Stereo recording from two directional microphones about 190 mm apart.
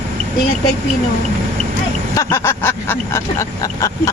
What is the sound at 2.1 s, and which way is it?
Speech, 15° left (ahead or behind).